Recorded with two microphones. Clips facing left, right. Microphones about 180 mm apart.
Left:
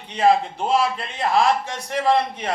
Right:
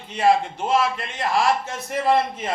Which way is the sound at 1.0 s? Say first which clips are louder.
Left 2 dB; 35° left (ahead or behind).